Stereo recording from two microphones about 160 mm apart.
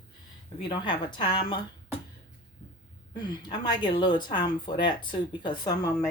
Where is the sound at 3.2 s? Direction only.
25° left (ahead or behind).